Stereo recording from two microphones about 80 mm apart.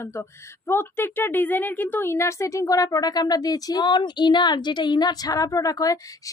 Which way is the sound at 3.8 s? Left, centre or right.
Left.